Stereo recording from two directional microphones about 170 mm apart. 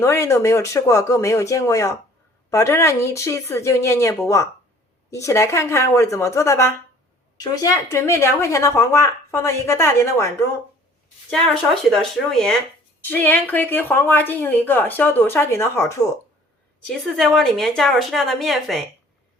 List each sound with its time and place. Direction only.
0.0 s a woman's voice: 15° left (ahead or behind)
11.3 s a woman's voice: 5° left (ahead or behind)
16.8 s a woman's voice: centre (ahead or behind)